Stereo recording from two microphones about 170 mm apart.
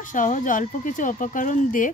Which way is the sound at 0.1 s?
50° left (ahead or behind).